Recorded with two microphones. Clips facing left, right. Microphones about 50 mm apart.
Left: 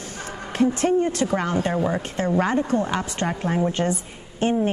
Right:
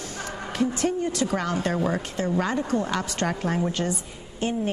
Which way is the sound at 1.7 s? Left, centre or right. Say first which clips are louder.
Left 2 dB; centre.